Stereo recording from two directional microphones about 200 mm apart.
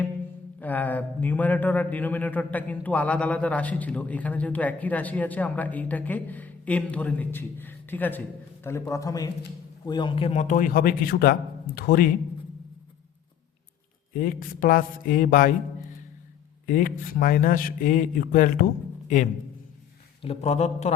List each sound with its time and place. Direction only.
0.6 s a man's voice: 10° left (ahead or behind); by 12.0 s 50° left (ahead or behind)
14.1 s a man's voice: 45° left (ahead or behind)
16.6 s a man's voice: 45° left (ahead or behind)